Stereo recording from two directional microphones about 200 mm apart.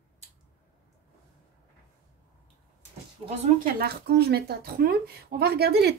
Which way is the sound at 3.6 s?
50° right (ahead or behind).